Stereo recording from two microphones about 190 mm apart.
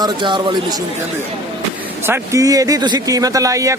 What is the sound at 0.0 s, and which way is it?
Speech, 25° right (ahead or behind).